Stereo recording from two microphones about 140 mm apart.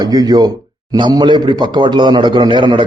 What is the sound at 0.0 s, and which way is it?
A man's voice, 30° right (ahead or behind).